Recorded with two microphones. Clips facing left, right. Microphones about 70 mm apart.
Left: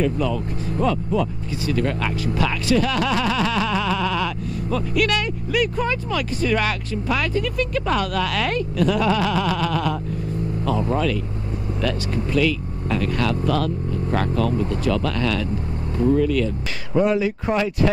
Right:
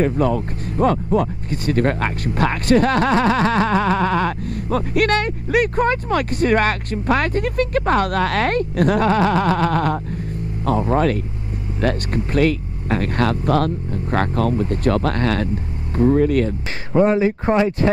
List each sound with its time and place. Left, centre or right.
0.0 s speech: right
16.9 s speech: right